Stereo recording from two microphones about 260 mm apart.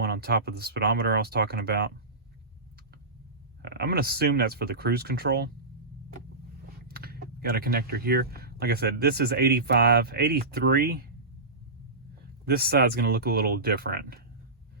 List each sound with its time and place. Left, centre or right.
0.0 s speech: right
3.6 s speech: right
6.8 s speech: right
12.5 s speech: right